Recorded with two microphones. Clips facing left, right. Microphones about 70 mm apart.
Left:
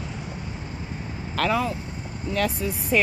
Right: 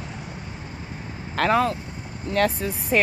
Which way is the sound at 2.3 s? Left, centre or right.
Right.